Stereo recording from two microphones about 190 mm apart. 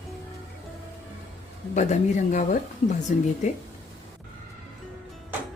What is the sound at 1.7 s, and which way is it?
Speech, 40° left (ahead or behind).